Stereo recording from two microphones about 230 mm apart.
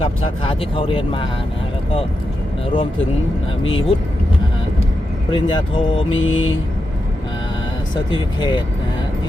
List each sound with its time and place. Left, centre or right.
0.0 s speech: left
3.6 s mantra: left
5.3 s speech: left
6.1 s mantra: left
8.1 s speech: left